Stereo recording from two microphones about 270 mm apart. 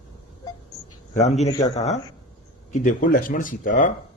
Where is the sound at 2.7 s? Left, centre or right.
Left.